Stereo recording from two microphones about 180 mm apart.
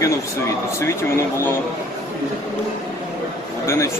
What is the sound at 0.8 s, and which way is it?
Speech, 15° left (ahead or behind).